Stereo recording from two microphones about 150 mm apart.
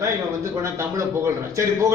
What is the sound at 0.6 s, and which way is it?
A man's voice, 20° right (ahead or behind).